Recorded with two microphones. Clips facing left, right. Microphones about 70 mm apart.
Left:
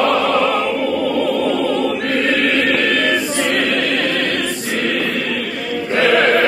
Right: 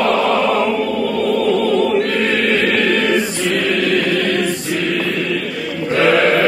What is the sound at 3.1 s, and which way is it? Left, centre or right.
Choir, left.